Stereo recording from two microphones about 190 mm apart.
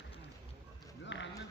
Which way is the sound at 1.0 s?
70° left (ahead or behind).